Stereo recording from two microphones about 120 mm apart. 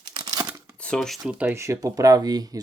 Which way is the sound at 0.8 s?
5° left (ahead or behind).